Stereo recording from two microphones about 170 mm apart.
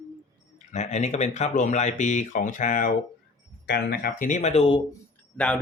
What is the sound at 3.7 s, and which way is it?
Speech, 70° left (ahead or behind).